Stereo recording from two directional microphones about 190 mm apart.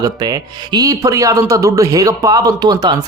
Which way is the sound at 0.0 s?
20° right (ahead or behind).